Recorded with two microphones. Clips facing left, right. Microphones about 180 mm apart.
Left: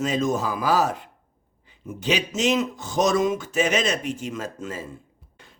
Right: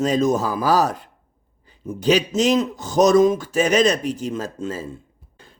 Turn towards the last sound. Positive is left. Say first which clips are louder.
# right 4 dB
turn(degrees=-30)  # may be behind; listen again after turning